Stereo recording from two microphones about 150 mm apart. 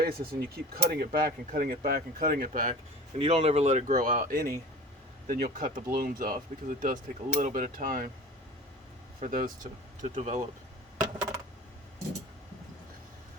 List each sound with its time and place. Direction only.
0.0 s speech: 90° right; by 2.7 s 60° right (ahead or behind)
3.2 s speech: 45° right (ahead or behind); by 8.1 s 65° right (ahead or behind)
9.2 s speech: 65° right (ahead or behind)
10.0 s speech: 50° right (ahead or behind)